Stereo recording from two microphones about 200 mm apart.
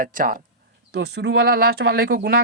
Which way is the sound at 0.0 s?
45° right (ahead or behind).